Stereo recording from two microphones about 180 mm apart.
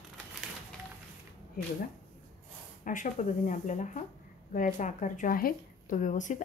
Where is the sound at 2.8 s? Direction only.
45° left (ahead or behind).